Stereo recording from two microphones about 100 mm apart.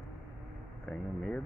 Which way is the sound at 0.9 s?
10° left (ahead or behind).